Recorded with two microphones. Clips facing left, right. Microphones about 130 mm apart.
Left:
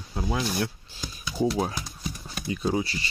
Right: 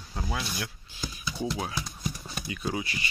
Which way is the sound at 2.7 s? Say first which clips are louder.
Left 6 dB; 30° left (ahead or behind).